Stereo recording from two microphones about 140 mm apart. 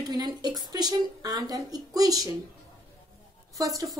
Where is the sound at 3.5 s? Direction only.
25° right (ahead or behind).